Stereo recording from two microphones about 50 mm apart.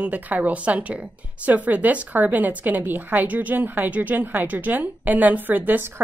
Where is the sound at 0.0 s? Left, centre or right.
Right.